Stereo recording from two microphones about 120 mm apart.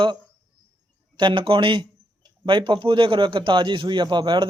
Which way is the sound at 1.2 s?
45° right (ahead or behind).